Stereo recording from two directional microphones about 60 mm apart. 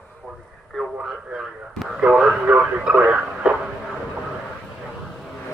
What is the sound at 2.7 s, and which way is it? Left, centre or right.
Radio, right.